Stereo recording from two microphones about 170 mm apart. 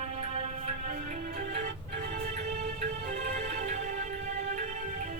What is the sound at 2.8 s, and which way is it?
Music, 45° right (ahead or behind).